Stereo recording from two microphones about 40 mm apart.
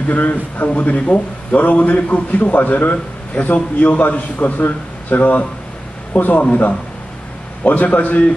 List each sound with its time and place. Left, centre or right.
0.1 s a man's voice: left
1.6 s a man's voice: left
4.6 s a man's voice: left
7.6 s a man's voice: left